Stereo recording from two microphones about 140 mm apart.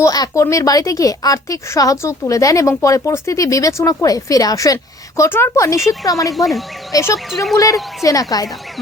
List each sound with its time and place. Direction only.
0.0 s speech: 25° left (ahead or behind)
6.3 s speech: centre (ahead or behind)
6.9 s speech: 25° left (ahead or behind)